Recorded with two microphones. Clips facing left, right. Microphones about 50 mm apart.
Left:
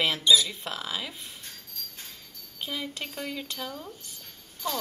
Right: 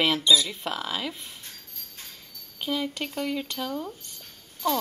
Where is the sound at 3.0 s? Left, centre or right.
Right.